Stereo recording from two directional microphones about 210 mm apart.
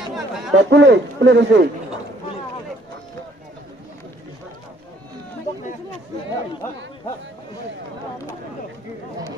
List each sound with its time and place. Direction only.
0.0 s speech: centre (ahead or behind)
0.7 s speech: 55° right (ahead or behind)